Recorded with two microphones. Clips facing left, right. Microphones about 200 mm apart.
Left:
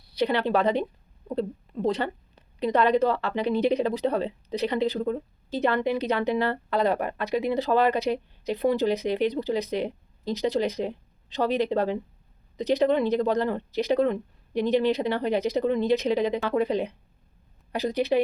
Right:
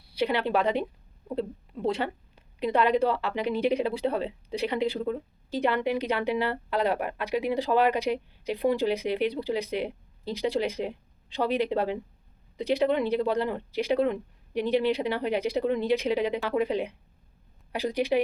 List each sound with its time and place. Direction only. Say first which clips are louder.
0.0 s a woman's voice: left 2 dB; 10° right (ahead or behind)